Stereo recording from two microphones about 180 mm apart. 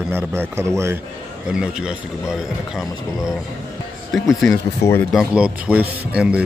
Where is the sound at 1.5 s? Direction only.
5° right (ahead or behind).